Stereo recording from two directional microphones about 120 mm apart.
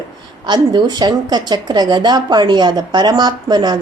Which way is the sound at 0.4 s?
35° right (ahead or behind).